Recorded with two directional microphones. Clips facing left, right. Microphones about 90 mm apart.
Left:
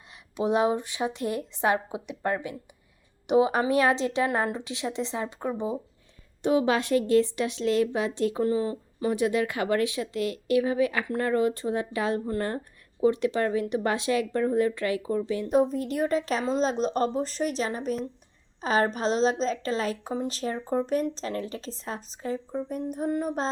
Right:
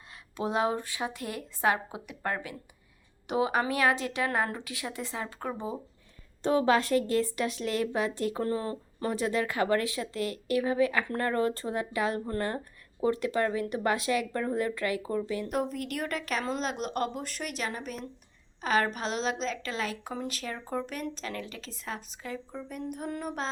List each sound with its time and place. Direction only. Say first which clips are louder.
0.3 s a woman's voice: left 5 dB; 20° left (ahead or behind)